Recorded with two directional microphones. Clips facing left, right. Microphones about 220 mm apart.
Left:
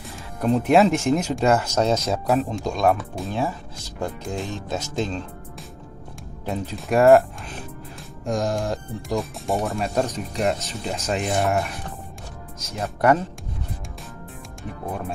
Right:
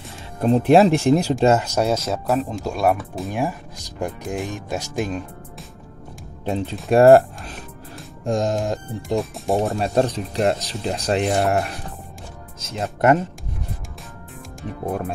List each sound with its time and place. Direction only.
0.4 s speech: 30° right (ahead or behind)
1.4 s speech: 20° right (ahead or behind)
2.0 s speech: centre (ahead or behind)
6.4 s speech: 25° right (ahead or behind)
8.3 s speech: 20° right (ahead or behind)
9.5 s speech: centre (ahead or behind)
9.9 s speech: 30° right (ahead or behind)
12.7 s speech: 25° right (ahead or behind)